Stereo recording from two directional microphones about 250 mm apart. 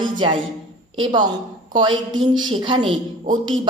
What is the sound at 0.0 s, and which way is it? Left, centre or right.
A woman's voice, centre.